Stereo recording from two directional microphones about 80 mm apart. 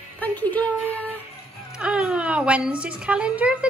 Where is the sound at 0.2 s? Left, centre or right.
Left.